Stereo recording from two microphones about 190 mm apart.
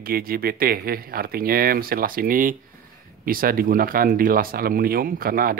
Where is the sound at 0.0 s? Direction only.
50° right (ahead or behind).